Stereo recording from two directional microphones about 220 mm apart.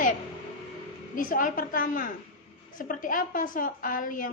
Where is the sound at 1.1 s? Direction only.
40° left (ahead or behind).